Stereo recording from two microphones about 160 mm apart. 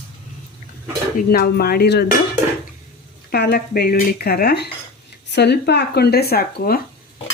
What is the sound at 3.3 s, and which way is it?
Speech, 85° left.